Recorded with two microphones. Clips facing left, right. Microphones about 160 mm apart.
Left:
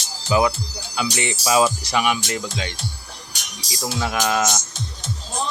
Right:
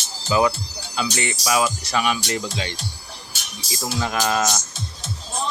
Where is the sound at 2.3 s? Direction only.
Centre (ahead or behind).